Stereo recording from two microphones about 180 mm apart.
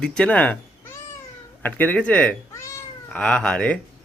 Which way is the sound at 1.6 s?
10° left (ahead or behind).